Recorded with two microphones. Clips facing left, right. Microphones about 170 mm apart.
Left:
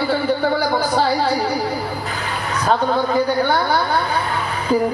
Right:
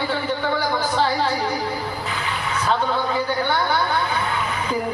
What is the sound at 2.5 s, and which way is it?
A man's voice, 45° left (ahead or behind).